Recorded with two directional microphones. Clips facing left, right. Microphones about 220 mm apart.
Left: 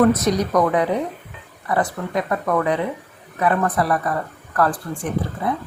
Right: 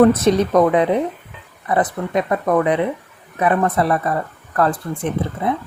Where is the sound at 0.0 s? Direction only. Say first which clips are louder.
Right 4 dB; 30° right (ahead or behind).